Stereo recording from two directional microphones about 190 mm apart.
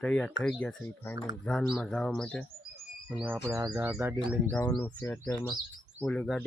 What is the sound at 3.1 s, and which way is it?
Speech, 5° right (ahead or behind).